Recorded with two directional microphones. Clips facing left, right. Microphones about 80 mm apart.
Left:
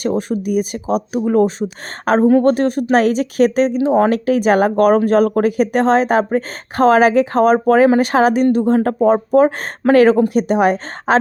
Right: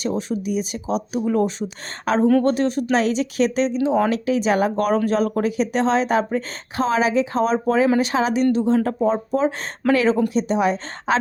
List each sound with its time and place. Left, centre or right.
0.0 s speech: left